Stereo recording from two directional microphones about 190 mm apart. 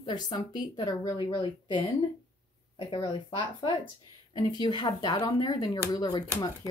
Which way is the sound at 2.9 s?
25° left (ahead or behind).